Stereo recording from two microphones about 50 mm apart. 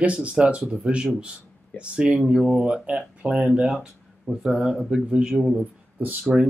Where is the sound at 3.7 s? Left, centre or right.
Centre.